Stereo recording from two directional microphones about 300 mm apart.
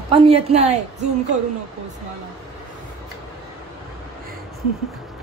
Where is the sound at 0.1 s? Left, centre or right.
Centre.